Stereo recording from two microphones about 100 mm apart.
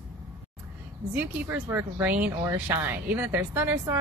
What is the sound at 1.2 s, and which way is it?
Speech, 15° right (ahead or behind).